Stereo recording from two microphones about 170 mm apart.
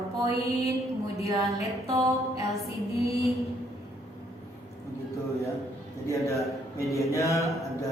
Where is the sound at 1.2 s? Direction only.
20° right (ahead or behind).